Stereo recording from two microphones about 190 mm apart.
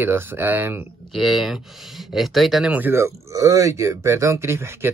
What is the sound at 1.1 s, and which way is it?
Speech, centre (ahead or behind).